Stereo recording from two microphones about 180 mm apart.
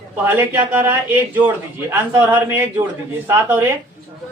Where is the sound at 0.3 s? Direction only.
10° right (ahead or behind).